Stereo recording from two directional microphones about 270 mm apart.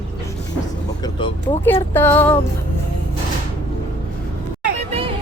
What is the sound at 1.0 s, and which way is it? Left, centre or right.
Speech, centre.